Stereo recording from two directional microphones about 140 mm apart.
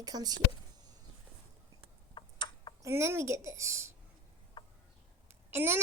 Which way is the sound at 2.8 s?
20° right (ahead or behind).